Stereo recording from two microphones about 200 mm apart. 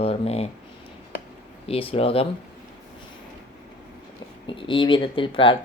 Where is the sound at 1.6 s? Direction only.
30° left (ahead or behind).